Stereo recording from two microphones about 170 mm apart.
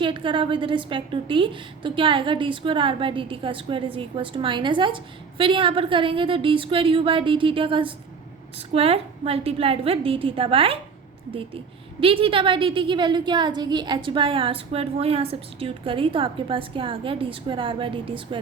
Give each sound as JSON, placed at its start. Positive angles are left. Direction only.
{"t": 0.0, "sound": "a woman's voice", "side_deg": -30}